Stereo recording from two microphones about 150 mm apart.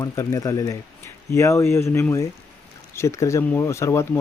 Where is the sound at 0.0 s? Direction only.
20° left (ahead or behind).